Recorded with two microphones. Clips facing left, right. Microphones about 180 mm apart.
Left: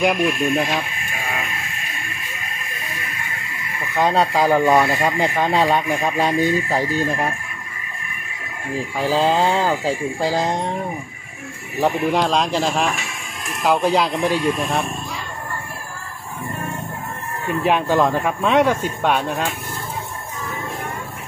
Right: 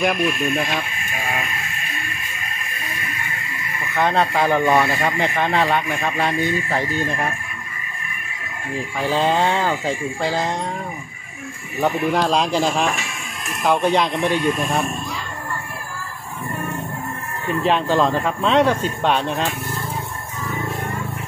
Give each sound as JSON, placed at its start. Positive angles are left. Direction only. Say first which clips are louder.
{"t": 0.0, "sound": "speech", "louder": "left 2 dB", "side_deg": 10}
{"t": 3.9, "sound": "speech", "louder": "left 1 dB", "side_deg": 10}
{"t": 8.9, "sound": "speech", "louder": "left 1 dB", "side_deg": 5}
{"t": 10.3, "sound": "speech", "louder": "left 2 dB", "side_deg": 20}
{"t": 12.3, "sound": "speech", "louder": "right 1 dB", "side_deg": 0}
{"t": 17.6, "sound": "speech", "louder": "left 1 dB", "side_deg": 10}